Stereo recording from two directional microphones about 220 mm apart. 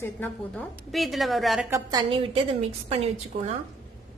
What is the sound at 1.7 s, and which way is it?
A woman's voice, 15° right (ahead or behind).